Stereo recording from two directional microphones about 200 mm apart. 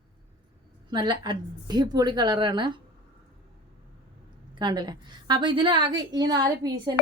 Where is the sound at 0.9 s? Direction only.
20° right (ahead or behind).